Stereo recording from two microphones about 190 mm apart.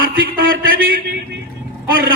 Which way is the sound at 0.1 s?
50° right (ahead or behind).